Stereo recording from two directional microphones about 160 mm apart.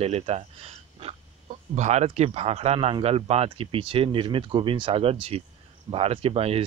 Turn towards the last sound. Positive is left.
turn(degrees=-35)  # may be behind; listen again after turning